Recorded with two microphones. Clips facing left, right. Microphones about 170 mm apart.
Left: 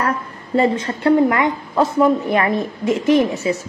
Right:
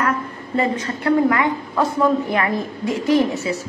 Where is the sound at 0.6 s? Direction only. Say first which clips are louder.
Left 4 dB; 30° left (ahead or behind).